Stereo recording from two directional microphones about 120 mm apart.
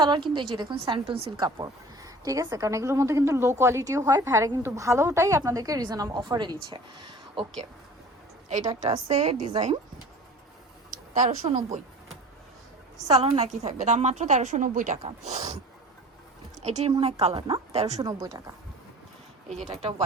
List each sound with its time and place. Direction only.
0.0 s a woman's voice: 40° right (ahead or behind)
8.6 s a woman's voice: 35° right (ahead or behind)
9.0 s a woman's voice: 70° right (ahead or behind)
11.4 s speech: 60° right (ahead or behind)
13.1 s a woman's voice: 55° right (ahead or behind)
13.5 s speech: 75° right (ahead or behind); by 14.9 s 90° right
15.2 s a woman's voice: 70° right (ahead or behind)
16.6 s a woman's voice: 65° right (ahead or behind)
18.0 s a woman's voice: 30° right (ahead or behind)
19.7 s speech: 60° right (ahead or behind)